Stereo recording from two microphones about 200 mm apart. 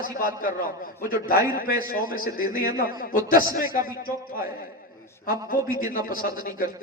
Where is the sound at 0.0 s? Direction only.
40° left (ahead or behind).